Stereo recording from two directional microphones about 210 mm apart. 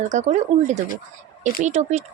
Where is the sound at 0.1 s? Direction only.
35° right (ahead or behind).